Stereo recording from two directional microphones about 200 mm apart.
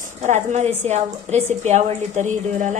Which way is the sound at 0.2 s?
35° right (ahead or behind).